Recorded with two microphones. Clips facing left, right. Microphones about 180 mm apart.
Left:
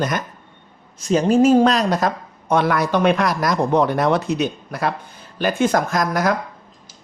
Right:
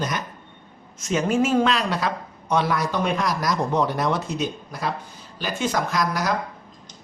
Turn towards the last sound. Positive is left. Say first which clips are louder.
# left 4 dB
turn(degrees=50)  # may be behind; listen again after turning